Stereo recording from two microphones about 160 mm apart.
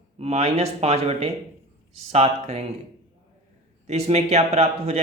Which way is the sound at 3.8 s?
45° right (ahead or behind).